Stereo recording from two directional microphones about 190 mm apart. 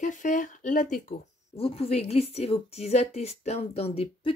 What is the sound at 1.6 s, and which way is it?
A woman's voice, 35° left (ahead or behind).